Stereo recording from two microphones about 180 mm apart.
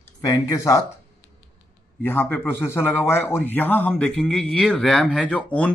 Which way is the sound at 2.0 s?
10° left (ahead or behind).